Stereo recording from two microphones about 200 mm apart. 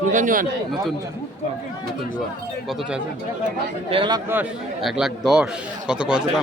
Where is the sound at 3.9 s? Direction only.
25° right (ahead or behind).